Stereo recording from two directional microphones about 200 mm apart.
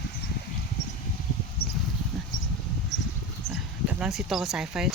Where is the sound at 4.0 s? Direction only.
Centre (ahead or behind).